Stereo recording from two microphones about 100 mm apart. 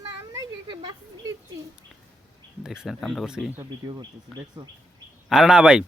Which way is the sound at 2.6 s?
5° right (ahead or behind).